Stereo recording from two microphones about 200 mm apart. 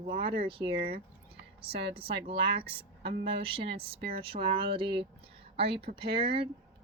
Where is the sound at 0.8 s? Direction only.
50° right (ahead or behind).